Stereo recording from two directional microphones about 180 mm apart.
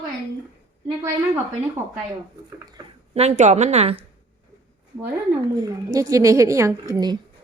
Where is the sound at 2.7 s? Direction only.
25° right (ahead or behind).